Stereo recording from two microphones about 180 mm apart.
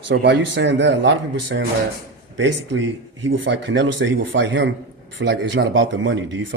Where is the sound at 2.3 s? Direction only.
90° right.